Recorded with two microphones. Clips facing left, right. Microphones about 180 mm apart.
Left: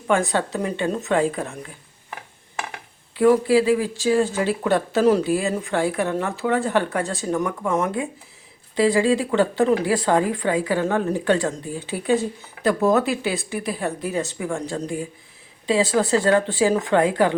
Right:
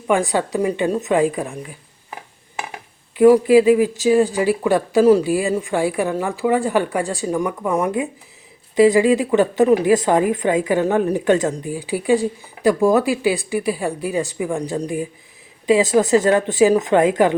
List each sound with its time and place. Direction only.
0.1 s speech: 15° right (ahead or behind)
3.2 s speech: 15° right (ahead or behind)